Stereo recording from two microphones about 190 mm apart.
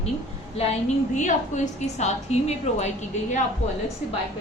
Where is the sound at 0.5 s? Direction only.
35° left (ahead or behind).